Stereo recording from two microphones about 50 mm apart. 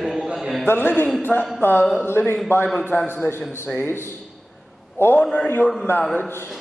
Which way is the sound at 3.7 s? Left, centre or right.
Left.